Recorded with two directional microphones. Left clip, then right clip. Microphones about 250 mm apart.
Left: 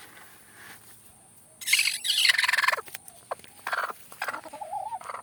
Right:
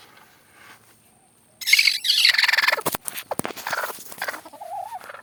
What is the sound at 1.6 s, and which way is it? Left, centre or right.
Bird, centre.